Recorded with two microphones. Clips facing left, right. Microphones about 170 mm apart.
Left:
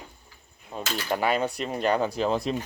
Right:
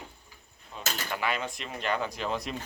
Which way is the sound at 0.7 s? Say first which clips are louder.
Left 6 dB; 45° left (ahead or behind).